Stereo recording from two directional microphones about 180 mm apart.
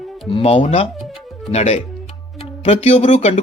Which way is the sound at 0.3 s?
30° left (ahead or behind).